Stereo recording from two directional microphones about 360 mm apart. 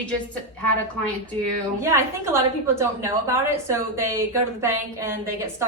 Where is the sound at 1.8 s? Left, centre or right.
Centre.